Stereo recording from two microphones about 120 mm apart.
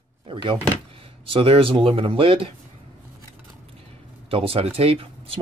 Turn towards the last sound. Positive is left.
turn(degrees=-50)  # may be behind; listen again after turning